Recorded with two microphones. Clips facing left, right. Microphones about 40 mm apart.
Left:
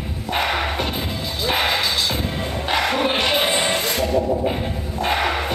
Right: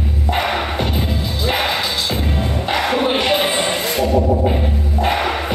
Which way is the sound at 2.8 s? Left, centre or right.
Centre.